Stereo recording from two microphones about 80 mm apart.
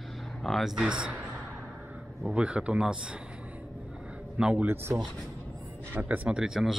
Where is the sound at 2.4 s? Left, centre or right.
Centre.